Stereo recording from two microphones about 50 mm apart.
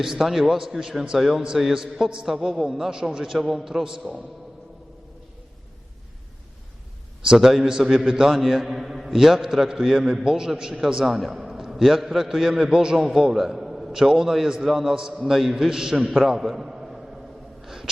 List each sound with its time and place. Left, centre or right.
0.0 s a man's voice: centre
7.3 s a man's voice: centre
17.6 s a sound: centre